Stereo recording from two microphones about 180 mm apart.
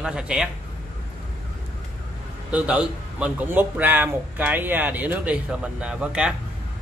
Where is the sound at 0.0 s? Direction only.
5° right (ahead or behind).